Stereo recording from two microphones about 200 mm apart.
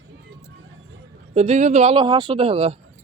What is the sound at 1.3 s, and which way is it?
Speech, 35° right (ahead or behind).